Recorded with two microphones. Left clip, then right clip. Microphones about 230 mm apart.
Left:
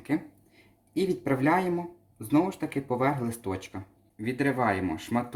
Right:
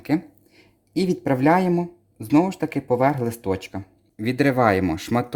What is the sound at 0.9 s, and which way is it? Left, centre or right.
Speech, right.